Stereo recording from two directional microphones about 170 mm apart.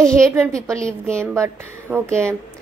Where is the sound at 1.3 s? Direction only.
15° right (ahead or behind).